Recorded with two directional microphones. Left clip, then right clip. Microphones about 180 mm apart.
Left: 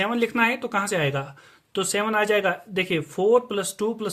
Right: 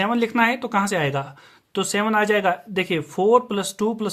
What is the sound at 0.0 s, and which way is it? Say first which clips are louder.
Speech: right 2 dB; 25° right (ahead or behind).